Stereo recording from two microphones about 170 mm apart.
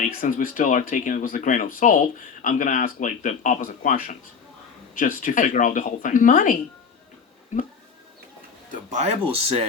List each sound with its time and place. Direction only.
0.2 s speech: 55° left (ahead or behind)
8.7 s speech: 40° right (ahead or behind)